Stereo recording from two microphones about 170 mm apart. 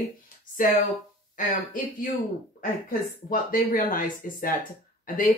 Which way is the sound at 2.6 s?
55° left (ahead or behind).